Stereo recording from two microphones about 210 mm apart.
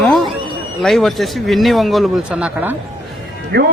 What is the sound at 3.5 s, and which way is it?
Speech, 50° right (ahead or behind).